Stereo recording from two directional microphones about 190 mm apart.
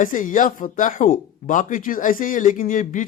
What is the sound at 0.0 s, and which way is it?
Speech, 45° left (ahead or behind).